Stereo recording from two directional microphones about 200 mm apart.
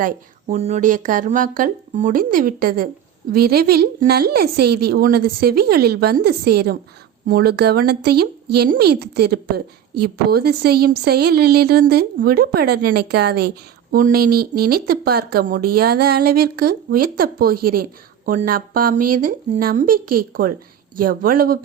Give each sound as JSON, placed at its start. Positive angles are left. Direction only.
{"t": 0.0, "sound": "speech", "side_deg": -40}